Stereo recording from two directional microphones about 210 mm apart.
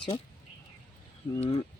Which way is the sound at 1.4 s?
30° left (ahead or behind).